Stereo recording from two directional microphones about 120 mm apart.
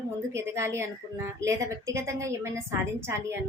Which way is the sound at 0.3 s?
25° right (ahead or behind).